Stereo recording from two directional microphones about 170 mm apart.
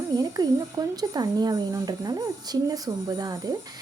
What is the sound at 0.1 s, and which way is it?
Speech, 20° right (ahead or behind).